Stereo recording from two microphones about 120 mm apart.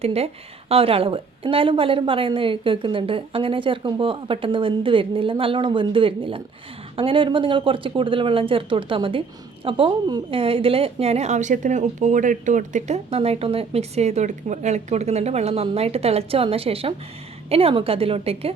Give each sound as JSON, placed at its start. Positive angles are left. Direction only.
{"t": 0.0, "sound": "a woman's voice", "side_deg": -60}